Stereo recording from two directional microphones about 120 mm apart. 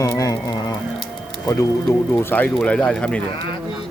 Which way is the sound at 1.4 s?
25° left (ahead or behind).